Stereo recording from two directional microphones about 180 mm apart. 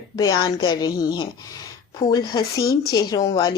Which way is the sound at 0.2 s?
25° left (ahead or behind).